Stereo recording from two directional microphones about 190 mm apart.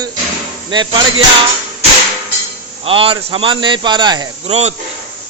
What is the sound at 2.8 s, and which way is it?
Speech, 30° right (ahead or behind).